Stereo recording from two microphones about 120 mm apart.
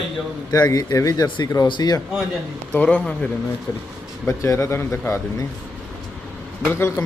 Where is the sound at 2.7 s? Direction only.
10° left (ahead or behind).